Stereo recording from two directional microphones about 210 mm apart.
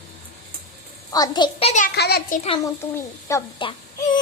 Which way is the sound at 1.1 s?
20° left (ahead or behind).